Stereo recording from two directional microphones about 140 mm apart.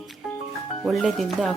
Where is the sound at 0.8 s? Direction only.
Centre (ahead or behind).